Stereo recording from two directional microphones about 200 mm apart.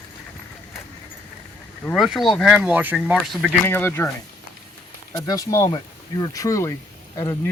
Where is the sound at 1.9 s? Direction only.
Centre (ahead or behind).